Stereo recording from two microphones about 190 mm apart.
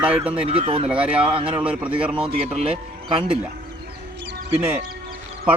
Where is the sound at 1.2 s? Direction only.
30° right (ahead or behind).